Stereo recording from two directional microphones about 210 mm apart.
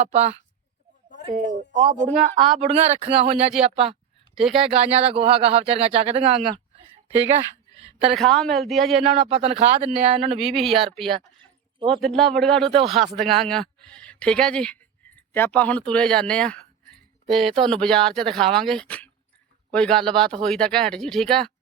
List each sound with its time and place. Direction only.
0.0 s speech: 30° right (ahead or behind)
2.4 s speech: centre (ahead or behind)
2.6 s speech: 30° right (ahead or behind)
4.4 s speech: centre (ahead or behind)
4.7 s speech: 30° right (ahead or behind)
8.1 s speech: centre (ahead or behind)
9.1 s speech: 30° right (ahead or behind)
10.4 s speech: centre (ahead or behind)